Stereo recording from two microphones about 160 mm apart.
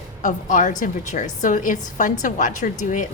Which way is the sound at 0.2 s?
55° left (ahead or behind).